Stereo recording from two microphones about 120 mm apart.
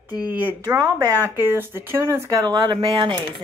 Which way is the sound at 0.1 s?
35° left (ahead or behind).